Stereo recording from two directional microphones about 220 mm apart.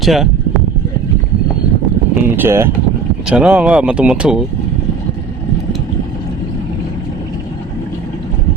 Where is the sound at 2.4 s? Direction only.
10° right (ahead or behind).